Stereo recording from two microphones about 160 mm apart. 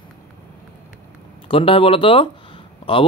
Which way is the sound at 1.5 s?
35° left (ahead or behind).